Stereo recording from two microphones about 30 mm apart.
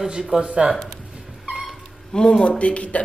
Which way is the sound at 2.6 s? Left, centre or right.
Left.